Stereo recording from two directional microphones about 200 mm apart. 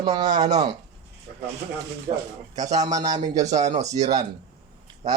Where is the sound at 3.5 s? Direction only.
35° right (ahead or behind).